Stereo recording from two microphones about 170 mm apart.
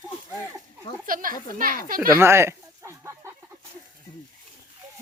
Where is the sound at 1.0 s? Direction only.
55° right (ahead or behind).